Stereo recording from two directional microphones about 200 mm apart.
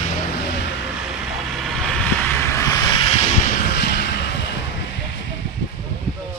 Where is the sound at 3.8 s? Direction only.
55° left (ahead or behind).